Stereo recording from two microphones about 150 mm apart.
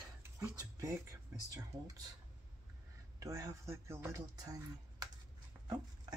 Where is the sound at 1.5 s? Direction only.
25° right (ahead or behind).